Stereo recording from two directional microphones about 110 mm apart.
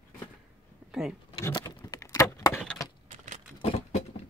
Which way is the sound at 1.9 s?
30° left (ahead or behind).